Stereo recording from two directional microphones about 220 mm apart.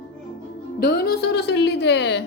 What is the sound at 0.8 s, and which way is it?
A woman's voice, 45° left (ahead or behind).